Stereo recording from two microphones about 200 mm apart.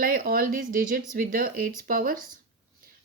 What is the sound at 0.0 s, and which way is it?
A woman's voice, 45° right (ahead or behind).